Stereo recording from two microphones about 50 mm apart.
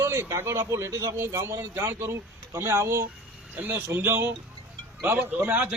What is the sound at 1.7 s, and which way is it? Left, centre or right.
Speech, right.